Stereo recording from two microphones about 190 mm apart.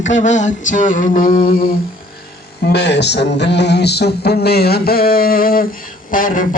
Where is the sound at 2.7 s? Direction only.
65° left (ahead or behind); by 6.5 s 45° left (ahead or behind).